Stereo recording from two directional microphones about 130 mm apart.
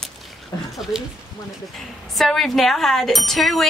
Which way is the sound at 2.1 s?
Centre (ahead or behind).